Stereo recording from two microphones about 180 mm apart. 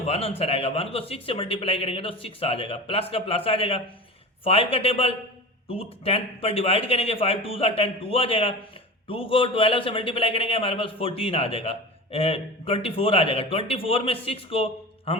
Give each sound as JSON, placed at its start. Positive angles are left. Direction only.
{"t": 0.0, "sound": "a man's voice", "side_deg": 35}